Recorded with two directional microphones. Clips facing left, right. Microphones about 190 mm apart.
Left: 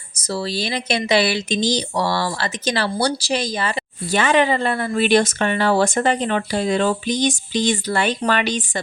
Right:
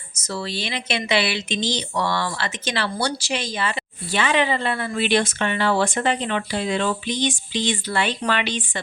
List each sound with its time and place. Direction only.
0.2 s speech: 35° left (ahead or behind)